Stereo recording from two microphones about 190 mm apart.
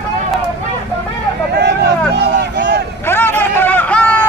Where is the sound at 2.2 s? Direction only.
60° right (ahead or behind).